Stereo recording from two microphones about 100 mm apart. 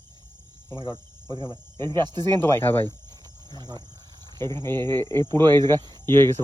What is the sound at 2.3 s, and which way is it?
Speech, 25° left (ahead or behind).